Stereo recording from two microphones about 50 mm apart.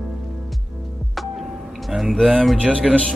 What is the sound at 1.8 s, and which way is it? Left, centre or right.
Speech, centre.